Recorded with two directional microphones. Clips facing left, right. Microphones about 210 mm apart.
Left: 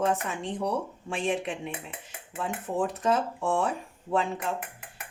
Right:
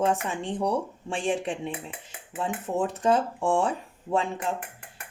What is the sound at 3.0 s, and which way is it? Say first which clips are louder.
Speech: right 3 dB; 30° right (ahead or behind).